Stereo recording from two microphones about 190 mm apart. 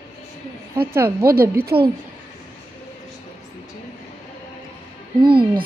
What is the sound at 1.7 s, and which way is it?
Speech, 30° right (ahead or behind).